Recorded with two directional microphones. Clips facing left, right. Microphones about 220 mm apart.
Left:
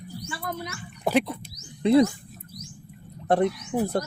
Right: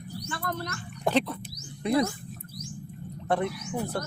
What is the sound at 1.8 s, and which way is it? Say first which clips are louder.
Speech: left 7 dB; 25° left (ahead or behind).